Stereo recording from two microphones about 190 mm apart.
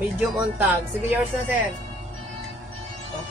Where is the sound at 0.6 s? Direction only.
10° right (ahead or behind).